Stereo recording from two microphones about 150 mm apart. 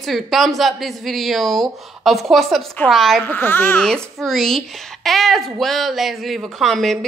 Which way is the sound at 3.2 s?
15° left (ahead or behind).